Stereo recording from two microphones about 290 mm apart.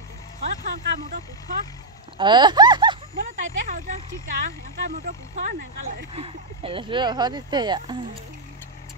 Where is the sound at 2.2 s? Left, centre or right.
Centre.